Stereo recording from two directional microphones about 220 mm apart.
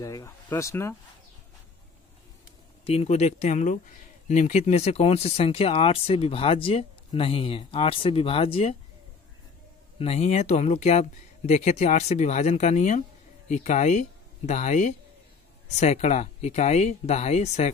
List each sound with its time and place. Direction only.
0.0 s speech: 15° left (ahead or behind)
2.8 s speech: 25° left (ahead or behind)
9.9 s speech: 30° left (ahead or behind)